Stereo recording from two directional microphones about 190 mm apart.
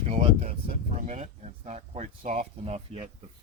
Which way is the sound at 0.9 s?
40° right (ahead or behind).